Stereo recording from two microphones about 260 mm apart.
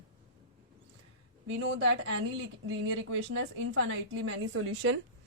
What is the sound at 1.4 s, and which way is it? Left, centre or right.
Speech, right.